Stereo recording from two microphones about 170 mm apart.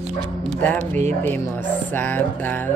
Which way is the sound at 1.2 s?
10° left (ahead or behind).